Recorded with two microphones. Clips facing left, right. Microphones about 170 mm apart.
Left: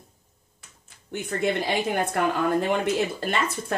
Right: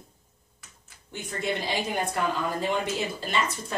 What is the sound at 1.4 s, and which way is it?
A woman's voice, 55° left (ahead or behind).